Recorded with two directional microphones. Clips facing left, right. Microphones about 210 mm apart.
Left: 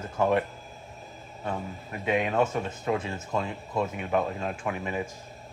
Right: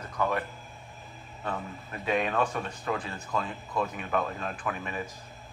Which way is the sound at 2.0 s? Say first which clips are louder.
Left 2 dB; 20° left (ahead or behind).